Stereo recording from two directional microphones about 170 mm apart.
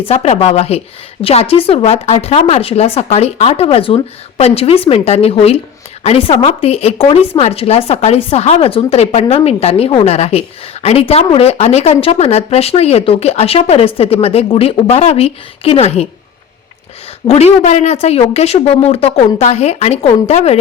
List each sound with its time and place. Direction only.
0.1 s a woman's voice: 40° left (ahead or behind)
17.2 s a woman's voice: 40° left (ahead or behind)